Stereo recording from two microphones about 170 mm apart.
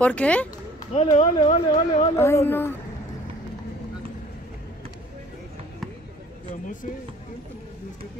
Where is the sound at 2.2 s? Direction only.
15° left (ahead or behind).